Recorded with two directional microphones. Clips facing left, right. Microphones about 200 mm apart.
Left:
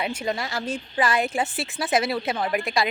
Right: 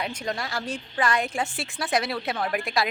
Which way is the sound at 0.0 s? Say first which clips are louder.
Left 3 dB; 5° left (ahead or behind).